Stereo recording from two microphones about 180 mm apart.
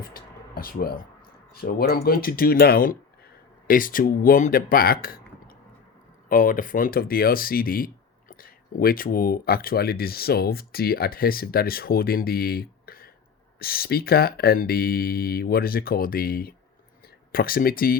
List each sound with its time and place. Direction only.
0.0 s speech: 55° left (ahead or behind)
6.2 s speech: 50° left (ahead or behind)